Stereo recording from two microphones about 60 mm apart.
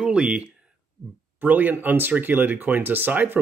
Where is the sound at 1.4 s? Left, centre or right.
Right.